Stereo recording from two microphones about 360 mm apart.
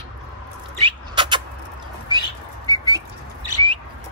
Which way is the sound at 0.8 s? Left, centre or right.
Centre.